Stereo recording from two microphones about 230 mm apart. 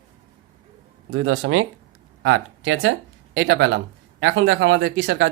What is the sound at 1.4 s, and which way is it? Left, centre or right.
Speech, right.